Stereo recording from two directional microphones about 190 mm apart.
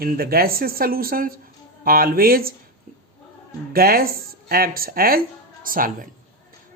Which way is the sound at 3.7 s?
50° right (ahead or behind).